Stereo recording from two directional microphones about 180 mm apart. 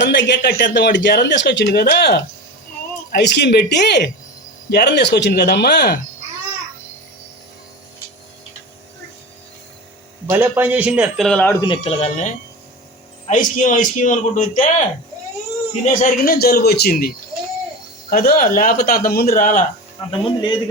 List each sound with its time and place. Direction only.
0.0 s speech: 75° left (ahead or behind)
10.2 s a man's voice: 10° right (ahead or behind); by 11.5 s 5° left (ahead or behind)
11.6 s a man's voice: 30° left (ahead or behind); by 14.7 s 45° left (ahead or behind)
15.9 s speech: 45° left (ahead or behind)
18.1 s speech: 55° left (ahead or behind)
20.1 s a man's voice: 30° left (ahead or behind)